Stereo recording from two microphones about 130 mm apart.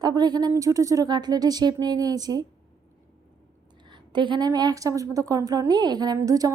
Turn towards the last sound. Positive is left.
turn(degrees=-25)  # may be behind; listen again after turning